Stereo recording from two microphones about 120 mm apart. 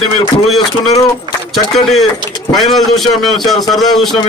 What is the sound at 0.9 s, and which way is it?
Speech, 35° left (ahead or behind).